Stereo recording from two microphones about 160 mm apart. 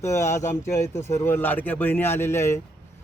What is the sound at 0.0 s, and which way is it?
A man's voice, 20° left (ahead or behind).